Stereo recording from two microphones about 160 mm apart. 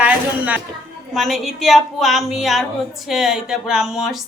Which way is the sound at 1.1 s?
Centre (ahead or behind).